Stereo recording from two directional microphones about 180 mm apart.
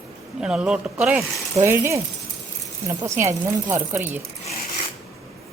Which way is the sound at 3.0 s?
15° right (ahead or behind).